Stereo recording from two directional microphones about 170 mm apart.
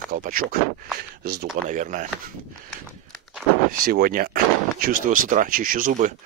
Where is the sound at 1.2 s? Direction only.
70° right (ahead or behind).